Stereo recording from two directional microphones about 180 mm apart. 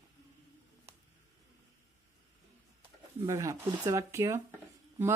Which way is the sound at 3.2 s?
20° right (ahead or behind).